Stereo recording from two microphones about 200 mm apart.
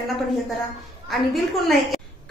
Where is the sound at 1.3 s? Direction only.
Centre (ahead or behind).